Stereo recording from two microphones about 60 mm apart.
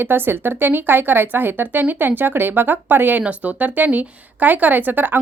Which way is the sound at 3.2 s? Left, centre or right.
Right.